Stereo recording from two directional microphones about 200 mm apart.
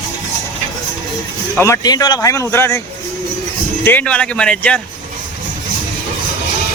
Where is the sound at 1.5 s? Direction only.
15° left (ahead or behind).